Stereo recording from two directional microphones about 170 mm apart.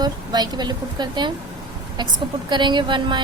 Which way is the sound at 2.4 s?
25° right (ahead or behind).